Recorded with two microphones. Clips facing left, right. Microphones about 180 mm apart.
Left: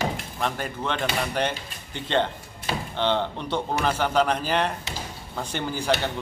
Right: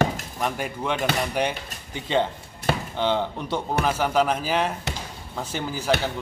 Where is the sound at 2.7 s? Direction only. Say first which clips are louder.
Right 4 dB; 55° right (ahead or behind).